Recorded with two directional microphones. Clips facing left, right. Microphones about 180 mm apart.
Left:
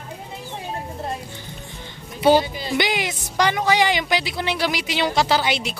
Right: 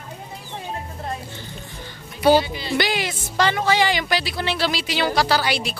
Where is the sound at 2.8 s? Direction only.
20° left (ahead or behind).